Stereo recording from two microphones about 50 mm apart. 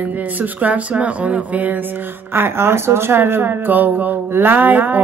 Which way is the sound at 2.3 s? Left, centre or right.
Right.